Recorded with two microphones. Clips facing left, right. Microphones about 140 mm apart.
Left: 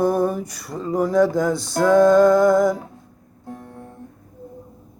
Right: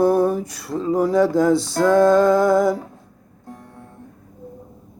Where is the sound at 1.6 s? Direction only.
Centre (ahead or behind).